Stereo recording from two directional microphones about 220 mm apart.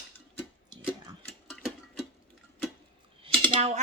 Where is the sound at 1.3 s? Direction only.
Centre (ahead or behind).